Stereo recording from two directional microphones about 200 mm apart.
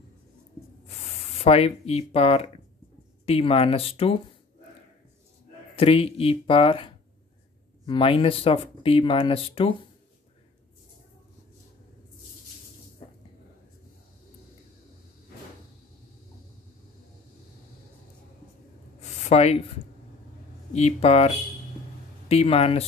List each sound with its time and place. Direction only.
0.8 s speech: 30° left (ahead or behind)
5.8 s speech: 30° left (ahead or behind)
18.9 s a sound: 35° left (ahead or behind)
20.7 s speech: 30° left (ahead or behind)
22.3 s speech: 30° left (ahead or behind)